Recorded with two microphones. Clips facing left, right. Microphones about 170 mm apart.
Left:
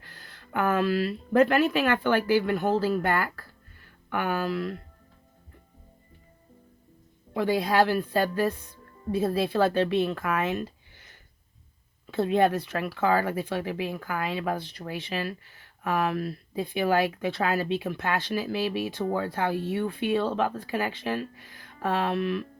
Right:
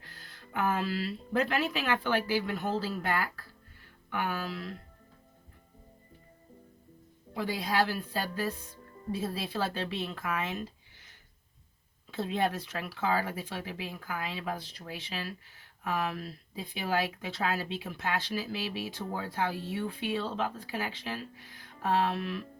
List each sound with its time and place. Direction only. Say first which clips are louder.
0.1 s speech: left 6 dB; 60° left (ahead or behind)
7.3 s speech: left 7 dB; 60° left (ahead or behind)
12.1 s speech: left 8 dB; 60° left (ahead or behind)